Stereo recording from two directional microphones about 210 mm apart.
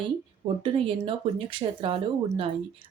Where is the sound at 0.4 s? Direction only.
25° right (ahead or behind).